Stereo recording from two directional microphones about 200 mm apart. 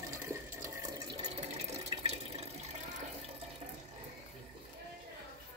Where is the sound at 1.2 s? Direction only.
30° right (ahead or behind).